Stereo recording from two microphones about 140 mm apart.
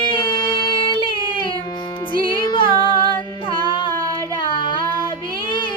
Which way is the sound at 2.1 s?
35° left (ahead or behind).